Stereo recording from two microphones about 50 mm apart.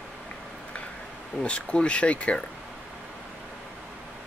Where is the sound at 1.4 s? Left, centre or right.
Left.